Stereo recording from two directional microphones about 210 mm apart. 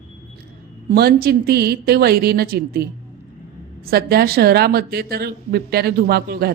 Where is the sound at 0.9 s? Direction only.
45° right (ahead or behind).